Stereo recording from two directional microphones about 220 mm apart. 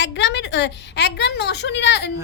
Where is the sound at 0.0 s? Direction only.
55° left (ahead or behind).